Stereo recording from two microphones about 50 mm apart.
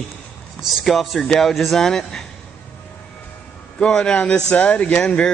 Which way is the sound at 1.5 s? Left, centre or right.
Centre.